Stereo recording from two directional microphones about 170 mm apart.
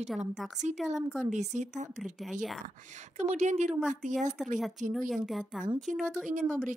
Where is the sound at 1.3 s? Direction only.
45° right (ahead or behind).